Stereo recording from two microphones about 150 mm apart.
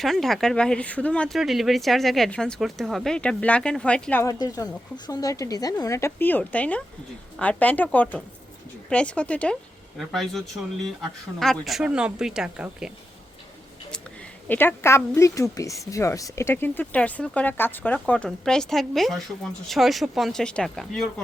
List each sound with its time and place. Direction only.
0.0 s speech: centre (ahead or behind)
4.2 s speech: 20° left (ahead or behind); by 12.9 s 5° right (ahead or behind)
14.4 s speech: 10° left (ahead or behind)